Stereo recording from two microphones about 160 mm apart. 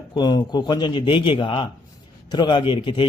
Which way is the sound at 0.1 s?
25° left (ahead or behind).